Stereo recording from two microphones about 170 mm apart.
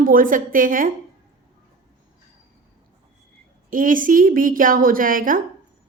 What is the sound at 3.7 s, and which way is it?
Speech, 55° right (ahead or behind).